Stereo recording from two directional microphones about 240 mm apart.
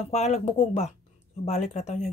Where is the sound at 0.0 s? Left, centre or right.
Left.